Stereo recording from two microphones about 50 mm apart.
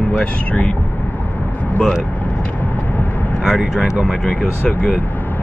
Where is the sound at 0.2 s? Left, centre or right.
Left.